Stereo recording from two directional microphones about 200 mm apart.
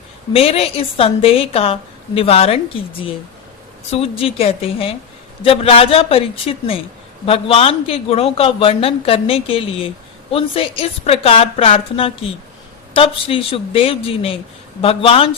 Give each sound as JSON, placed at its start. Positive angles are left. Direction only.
{"t": 0.3, "sound": "a woman's voice", "side_deg": 30}
{"t": 3.9, "sound": "a woman's voice", "side_deg": 30}